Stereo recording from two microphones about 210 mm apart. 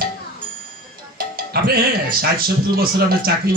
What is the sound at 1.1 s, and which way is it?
Speech, 45° right (ahead or behind).